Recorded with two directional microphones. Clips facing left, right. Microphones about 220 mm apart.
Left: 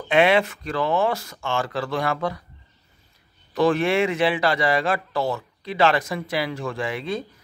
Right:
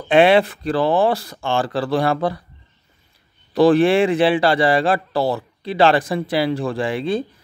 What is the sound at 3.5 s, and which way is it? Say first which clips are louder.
Speech: right 6 dB; 35° right (ahead or behind).